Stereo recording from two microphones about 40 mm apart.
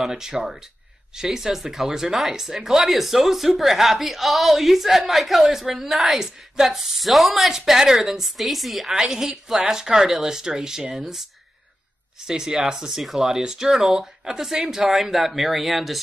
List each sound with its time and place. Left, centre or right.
0.1 s speech: centre
12.3 s speech: centre